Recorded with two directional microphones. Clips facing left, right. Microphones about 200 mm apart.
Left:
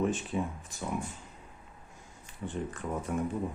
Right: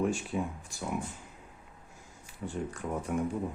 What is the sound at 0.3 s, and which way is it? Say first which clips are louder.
Speech: even; 5° right (ahead or behind).